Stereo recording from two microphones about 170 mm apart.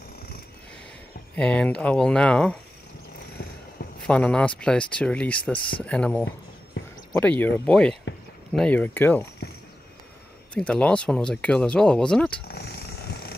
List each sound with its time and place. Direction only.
1.3 s speech: 5° left (ahead or behind)
4.1 s speech: 5° left (ahead or behind)
10.5 s speech: 5° left (ahead or behind)
12.4 s a sound: 70° left (ahead or behind)